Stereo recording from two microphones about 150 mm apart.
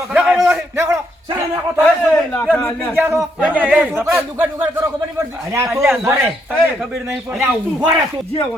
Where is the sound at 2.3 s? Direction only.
5° left (ahead or behind).